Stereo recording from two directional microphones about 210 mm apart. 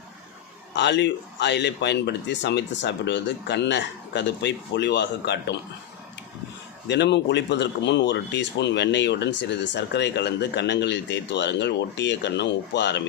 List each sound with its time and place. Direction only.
0.7 s speech: 55° left (ahead or behind)
6.8 s speech: 55° left (ahead or behind)